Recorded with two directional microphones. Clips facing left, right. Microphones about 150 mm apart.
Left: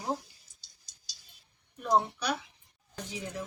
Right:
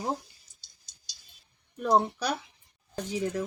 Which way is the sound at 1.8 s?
35° right (ahead or behind).